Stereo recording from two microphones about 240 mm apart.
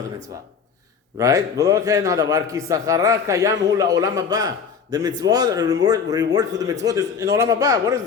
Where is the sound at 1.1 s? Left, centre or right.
Centre.